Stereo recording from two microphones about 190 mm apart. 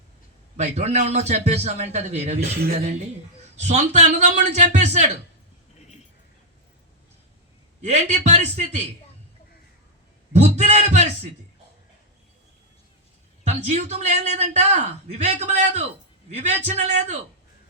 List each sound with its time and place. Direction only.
0.5 s a man's voice: 35° right (ahead or behind)
3.6 s a man's voice: 35° right (ahead or behind)
7.9 s a man's voice: 35° right (ahead or behind)
10.3 s a man's voice: 35° right (ahead or behind)
13.4 s a man's voice: 35° right (ahead or behind)